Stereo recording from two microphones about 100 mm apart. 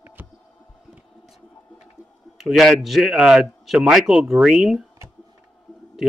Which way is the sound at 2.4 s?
Centre (ahead or behind).